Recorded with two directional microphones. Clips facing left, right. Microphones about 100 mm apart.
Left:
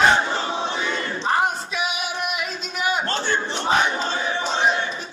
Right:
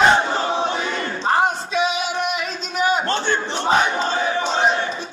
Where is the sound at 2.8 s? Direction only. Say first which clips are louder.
Right 4 dB; 30° right (ahead or behind).